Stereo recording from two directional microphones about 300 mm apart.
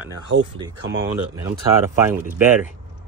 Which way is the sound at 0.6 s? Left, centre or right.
Centre.